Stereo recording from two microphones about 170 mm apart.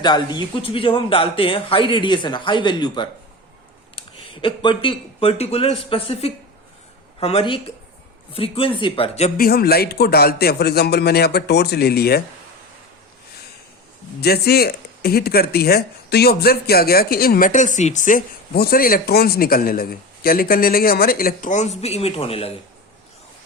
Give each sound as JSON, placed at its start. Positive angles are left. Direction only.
{"t": 0.0, "sound": "a man's voice", "side_deg": 25}
{"t": 9.4, "sound": "a man's voice", "side_deg": 65}
{"t": 14.2, "sound": "speech", "side_deg": 65}